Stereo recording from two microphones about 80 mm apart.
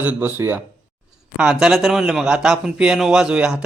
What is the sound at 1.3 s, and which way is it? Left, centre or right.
A man's voice, centre.